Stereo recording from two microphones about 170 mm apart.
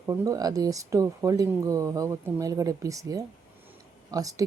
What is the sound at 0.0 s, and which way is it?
Speech, 20° right (ahead or behind).